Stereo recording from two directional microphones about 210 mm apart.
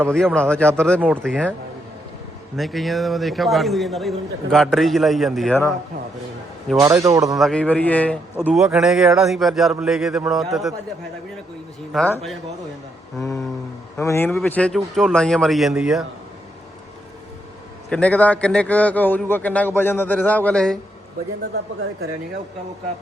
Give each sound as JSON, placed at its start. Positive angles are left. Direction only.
{"t": 0.0, "sound": "a man's voice", "side_deg": 5}
{"t": 2.6, "sound": "a man's voice", "side_deg": 0}
{"t": 7.0, "sound": "speech", "side_deg": -15}
{"t": 7.3, "sound": "a man's voice", "side_deg": 0}
{"t": 11.9, "sound": "a man's voice", "side_deg": 5}
{"t": 13.9, "sound": "a man's voice", "side_deg": 10}
{"t": 17.8, "sound": "a man's voice", "side_deg": 5}